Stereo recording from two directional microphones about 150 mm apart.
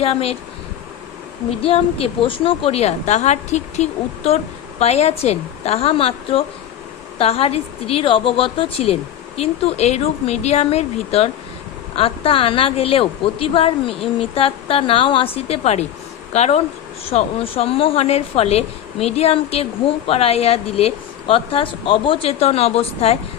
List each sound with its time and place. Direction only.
0.0 s speech: 40° left (ahead or behind)
1.5 s a woman's voice: 40° left (ahead or behind)